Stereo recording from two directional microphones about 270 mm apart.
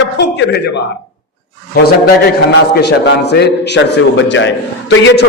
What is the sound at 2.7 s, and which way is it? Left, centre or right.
A man's voice, left.